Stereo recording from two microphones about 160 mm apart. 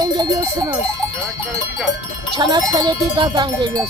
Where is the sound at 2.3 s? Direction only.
25° right (ahead or behind).